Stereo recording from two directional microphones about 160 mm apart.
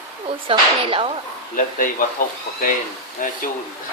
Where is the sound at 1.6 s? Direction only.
55° left (ahead or behind).